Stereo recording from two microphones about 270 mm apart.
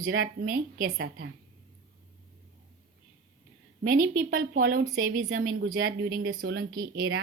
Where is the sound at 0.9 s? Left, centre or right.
Right.